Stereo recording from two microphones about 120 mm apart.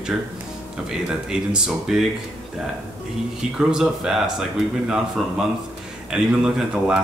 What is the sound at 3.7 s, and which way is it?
Speech, 5° right (ahead or behind).